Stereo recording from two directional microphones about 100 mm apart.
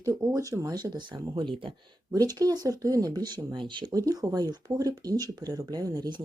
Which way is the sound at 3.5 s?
55° right (ahead or behind).